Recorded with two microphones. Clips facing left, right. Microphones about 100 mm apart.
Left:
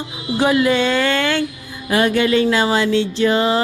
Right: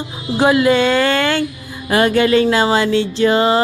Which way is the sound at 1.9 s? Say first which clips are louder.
Right 3 dB; 45° right (ahead or behind).